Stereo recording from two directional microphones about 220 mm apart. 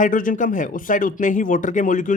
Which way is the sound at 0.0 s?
40° left (ahead or behind).